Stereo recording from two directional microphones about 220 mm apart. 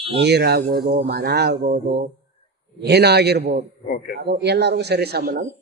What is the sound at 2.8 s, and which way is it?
A man's voice, 50° right (ahead or behind).